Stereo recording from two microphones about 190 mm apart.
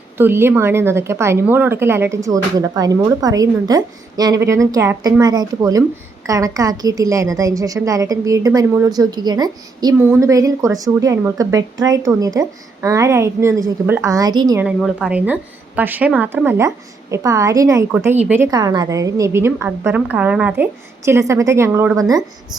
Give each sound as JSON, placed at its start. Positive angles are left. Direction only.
{"t": 0.2, "sound": "a woman's voice", "side_deg": -10}
{"t": 14.6, "sound": "a woman's voice", "side_deg": -5}
{"t": 18.5, "sound": "a woman's voice", "side_deg": -20}